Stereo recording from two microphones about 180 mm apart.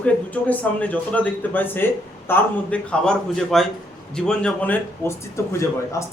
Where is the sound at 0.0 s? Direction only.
10° left (ahead or behind).